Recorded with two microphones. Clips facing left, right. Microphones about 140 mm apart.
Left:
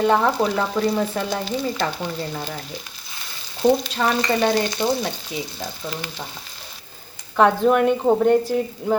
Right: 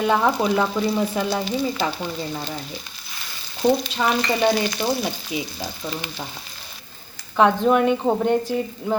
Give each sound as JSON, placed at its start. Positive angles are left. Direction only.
{"t": 0.0, "sound": "frying", "side_deg": -5}
{"t": 3.6, "sound": "frying", "side_deg": 0}
{"t": 4.7, "sound": "frying", "side_deg": 25}
{"t": 5.3, "sound": "frying", "side_deg": -10}
{"t": 7.3, "sound": "frying", "side_deg": 0}